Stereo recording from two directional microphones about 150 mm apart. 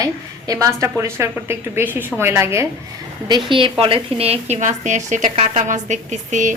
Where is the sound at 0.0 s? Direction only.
25° right (ahead or behind).